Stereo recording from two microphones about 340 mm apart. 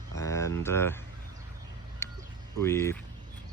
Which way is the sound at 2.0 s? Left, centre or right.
Centre.